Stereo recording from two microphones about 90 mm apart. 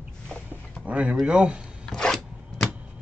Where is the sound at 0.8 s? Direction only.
15° right (ahead or behind).